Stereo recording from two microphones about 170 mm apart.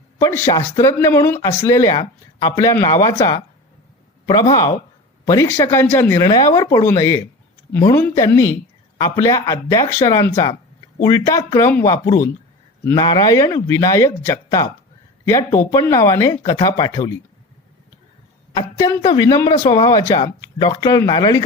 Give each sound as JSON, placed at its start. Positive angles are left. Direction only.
{"t": 0.2, "sound": "speech", "side_deg": 15}
{"t": 12.8, "sound": "speech", "side_deg": 20}
{"t": 18.5, "sound": "speech", "side_deg": 25}